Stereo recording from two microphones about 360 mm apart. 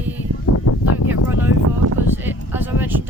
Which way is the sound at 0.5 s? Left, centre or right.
Left.